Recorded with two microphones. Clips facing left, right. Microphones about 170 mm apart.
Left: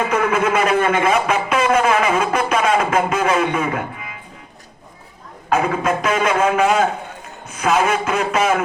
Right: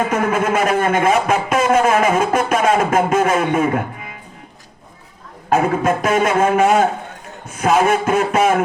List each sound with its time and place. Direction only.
0.0 s a man's voice: 45° right (ahead or behind)
5.5 s a man's voice: 45° right (ahead or behind)